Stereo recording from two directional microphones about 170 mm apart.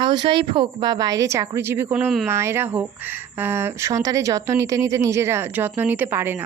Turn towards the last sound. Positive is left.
turn(degrees=-10)  # may be behind; listen again after turning